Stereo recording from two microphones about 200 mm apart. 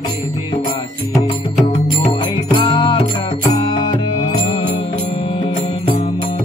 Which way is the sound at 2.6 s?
20° left (ahead or behind).